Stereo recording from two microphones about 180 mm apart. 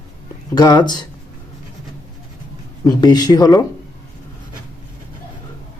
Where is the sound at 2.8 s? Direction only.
25° left (ahead or behind).